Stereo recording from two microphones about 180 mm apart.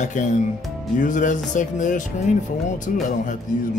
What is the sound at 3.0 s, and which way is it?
Speech, 45° left (ahead or behind).